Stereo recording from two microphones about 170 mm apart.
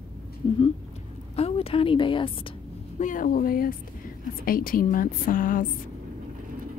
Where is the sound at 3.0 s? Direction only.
50° left (ahead or behind).